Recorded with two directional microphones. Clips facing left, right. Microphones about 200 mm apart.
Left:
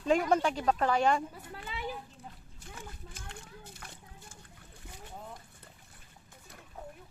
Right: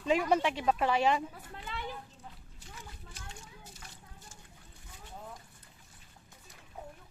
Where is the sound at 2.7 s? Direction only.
50° left (ahead or behind).